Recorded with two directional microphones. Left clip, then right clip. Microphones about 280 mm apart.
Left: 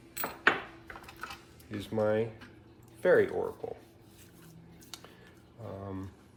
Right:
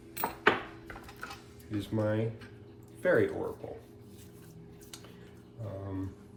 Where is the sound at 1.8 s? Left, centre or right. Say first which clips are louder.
Left 3 dB; centre.